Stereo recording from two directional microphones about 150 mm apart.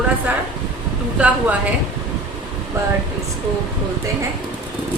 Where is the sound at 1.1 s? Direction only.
10° right (ahead or behind).